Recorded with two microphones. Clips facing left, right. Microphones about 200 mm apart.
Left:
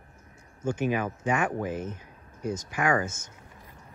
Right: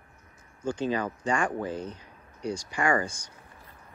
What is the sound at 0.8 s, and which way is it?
Speech, 10° left (ahead or behind).